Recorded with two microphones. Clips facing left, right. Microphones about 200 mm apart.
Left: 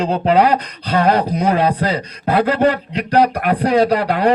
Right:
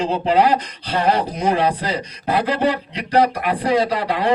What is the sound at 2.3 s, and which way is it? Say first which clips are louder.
Speech: left 4 dB; 50° left (ahead or behind).